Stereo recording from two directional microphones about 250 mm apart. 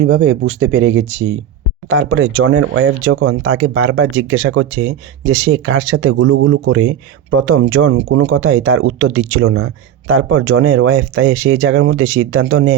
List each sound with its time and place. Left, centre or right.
0.0 s speech: right